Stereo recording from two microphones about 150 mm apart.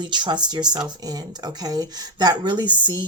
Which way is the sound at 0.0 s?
30° right (ahead or behind).